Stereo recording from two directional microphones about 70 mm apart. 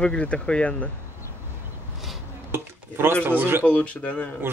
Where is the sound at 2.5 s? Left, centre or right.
Right.